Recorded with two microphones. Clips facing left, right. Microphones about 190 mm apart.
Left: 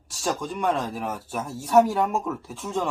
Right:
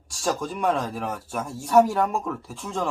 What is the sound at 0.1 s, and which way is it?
Speech, centre (ahead or behind).